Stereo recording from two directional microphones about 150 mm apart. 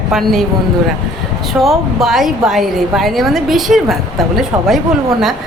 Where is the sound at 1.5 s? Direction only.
Centre (ahead or behind).